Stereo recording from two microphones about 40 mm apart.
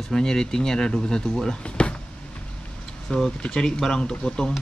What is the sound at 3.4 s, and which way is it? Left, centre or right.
Speech, centre.